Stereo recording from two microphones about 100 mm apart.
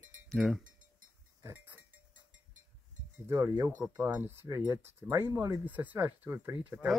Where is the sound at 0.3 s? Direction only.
Centre (ahead or behind).